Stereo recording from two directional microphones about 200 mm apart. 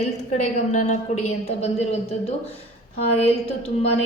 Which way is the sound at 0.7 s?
35° left (ahead or behind).